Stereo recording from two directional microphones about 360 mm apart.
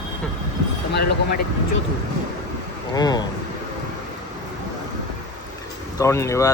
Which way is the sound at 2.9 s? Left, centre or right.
Centre.